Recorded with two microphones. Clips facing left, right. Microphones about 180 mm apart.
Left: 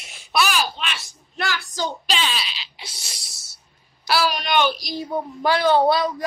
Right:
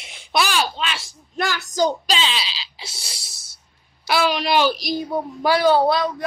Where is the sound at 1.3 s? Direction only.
45° right (ahead or behind).